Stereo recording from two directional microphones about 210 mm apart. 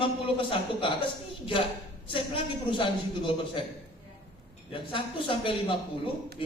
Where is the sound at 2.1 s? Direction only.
25° left (ahead or behind).